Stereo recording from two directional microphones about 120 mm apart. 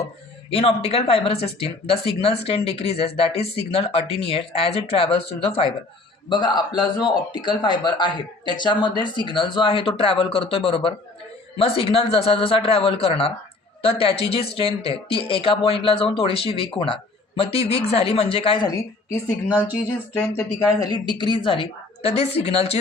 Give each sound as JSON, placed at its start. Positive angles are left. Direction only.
{"t": 0.5, "sound": "speech", "side_deg": 55}
{"t": 6.2, "sound": "a man's voice", "side_deg": 40}
{"t": 20.1, "sound": "speech", "side_deg": 25}